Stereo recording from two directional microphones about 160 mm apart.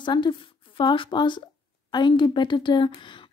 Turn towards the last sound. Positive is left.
turn(degrees=30)  # may be behind; listen again after turning